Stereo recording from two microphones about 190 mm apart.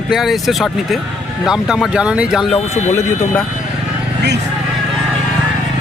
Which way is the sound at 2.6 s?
35° left (ahead or behind).